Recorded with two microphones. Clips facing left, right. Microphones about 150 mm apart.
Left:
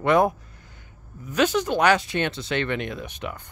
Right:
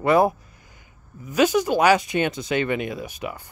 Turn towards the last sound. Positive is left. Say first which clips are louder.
# right 2 dB
turn(degrees=-10)  # may be behind; listen again after turning